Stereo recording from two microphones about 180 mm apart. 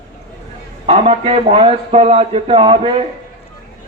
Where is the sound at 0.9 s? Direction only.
30° right (ahead or behind).